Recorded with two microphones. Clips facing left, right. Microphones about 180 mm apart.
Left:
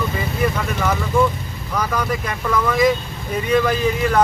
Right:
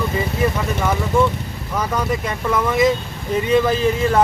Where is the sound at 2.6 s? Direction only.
25° right (ahead or behind).